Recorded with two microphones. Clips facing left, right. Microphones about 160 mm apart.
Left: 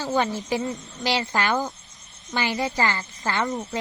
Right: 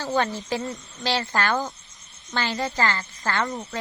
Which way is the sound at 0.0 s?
15° left (ahead or behind).